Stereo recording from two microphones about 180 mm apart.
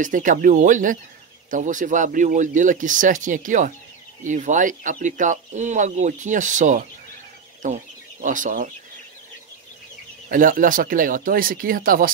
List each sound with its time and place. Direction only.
0.0 s speech: 45° right (ahead or behind)
10.3 s speech: 50° right (ahead or behind)